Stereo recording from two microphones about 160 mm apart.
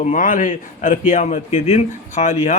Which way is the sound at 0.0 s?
55° left (ahead or behind).